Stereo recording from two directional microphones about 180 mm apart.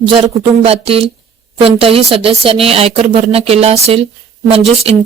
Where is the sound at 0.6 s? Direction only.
35° right (ahead or behind).